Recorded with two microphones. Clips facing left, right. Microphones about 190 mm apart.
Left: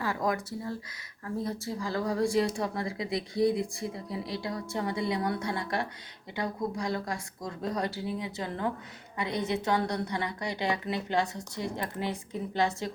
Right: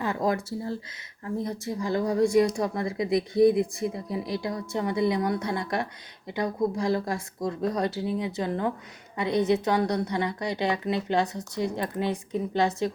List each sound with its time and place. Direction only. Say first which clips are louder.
0.0 s speech: right 4 dB; 25° right (ahead or behind)